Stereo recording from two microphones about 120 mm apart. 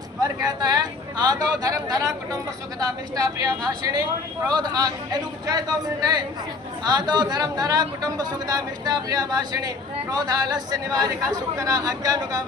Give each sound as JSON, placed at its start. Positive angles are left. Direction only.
{"t": 0.2, "sound": "a man's voice", "side_deg": -35}